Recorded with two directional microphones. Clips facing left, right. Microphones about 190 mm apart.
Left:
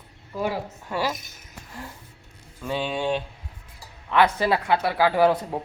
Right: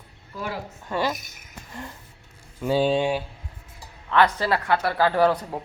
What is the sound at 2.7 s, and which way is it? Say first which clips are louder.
Speech: right 7 dB; 35° right (ahead or behind).